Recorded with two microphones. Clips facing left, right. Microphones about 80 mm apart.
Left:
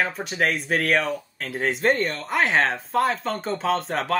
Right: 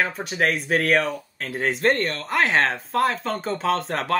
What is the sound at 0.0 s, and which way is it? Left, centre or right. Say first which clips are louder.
Speech: right 1 dB; centre.